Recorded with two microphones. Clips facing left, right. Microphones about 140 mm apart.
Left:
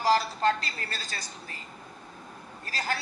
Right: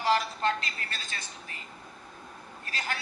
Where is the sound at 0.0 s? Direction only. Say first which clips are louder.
Left 3 dB; 35° left (ahead or behind).